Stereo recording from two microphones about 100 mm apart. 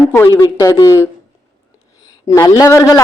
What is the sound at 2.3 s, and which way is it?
Speech, 35° left (ahead or behind).